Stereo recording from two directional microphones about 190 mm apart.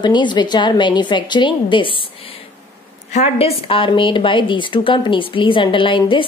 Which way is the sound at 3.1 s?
35° left (ahead or behind).